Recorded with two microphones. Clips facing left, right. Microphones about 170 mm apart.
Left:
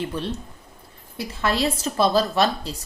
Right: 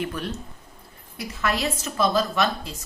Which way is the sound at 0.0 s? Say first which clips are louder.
Left 2 dB; 25° left (ahead or behind).